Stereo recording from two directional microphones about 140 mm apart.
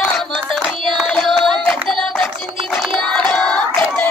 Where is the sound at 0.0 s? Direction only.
5° left (ahead or behind).